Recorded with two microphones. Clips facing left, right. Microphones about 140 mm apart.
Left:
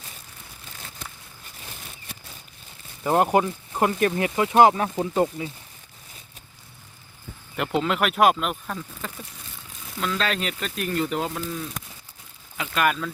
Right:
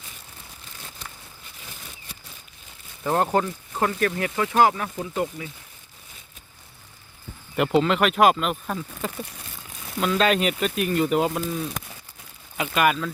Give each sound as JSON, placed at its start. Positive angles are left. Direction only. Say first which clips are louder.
{"t": 3.0, "sound": "speech", "louder": "left 2 dB", "side_deg": 10}
{"t": 7.5, "sound": "speech", "louder": "right 4 dB", "side_deg": -5}
{"t": 8.6, "sound": "speech", "louder": "right 4 dB", "side_deg": -15}
{"t": 12.5, "sound": "speech", "louder": "right 2 dB", "side_deg": -10}